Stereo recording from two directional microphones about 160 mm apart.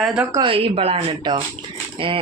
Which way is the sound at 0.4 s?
35° right (ahead or behind).